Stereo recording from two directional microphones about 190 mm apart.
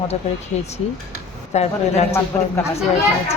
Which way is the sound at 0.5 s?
35° left (ahead or behind).